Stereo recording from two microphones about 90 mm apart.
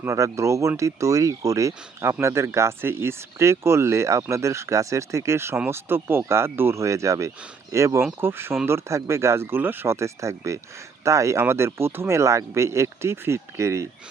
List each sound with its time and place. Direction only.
0.0 s speech: 35° right (ahead or behind)